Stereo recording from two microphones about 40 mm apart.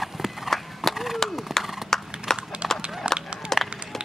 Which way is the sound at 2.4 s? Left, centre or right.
Right.